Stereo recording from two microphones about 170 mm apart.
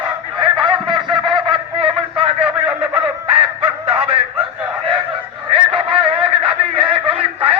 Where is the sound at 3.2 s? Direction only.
35° right (ahead or behind).